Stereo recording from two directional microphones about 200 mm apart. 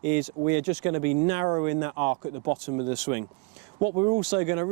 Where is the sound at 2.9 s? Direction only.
10° right (ahead or behind).